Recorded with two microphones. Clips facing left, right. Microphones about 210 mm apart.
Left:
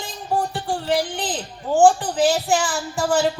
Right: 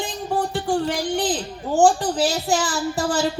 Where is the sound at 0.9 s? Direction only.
40° right (ahead or behind).